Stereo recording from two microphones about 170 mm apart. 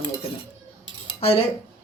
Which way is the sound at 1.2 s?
35° left (ahead or behind).